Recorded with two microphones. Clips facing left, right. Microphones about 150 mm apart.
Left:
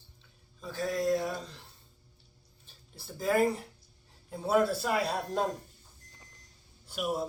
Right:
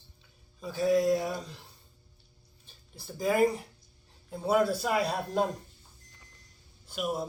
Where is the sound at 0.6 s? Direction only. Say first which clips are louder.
Right 6 dB; 5° right (ahead or behind).